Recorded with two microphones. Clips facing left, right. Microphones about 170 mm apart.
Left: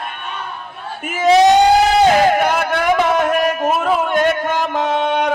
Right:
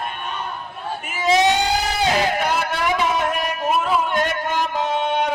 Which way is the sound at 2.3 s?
55° left (ahead or behind).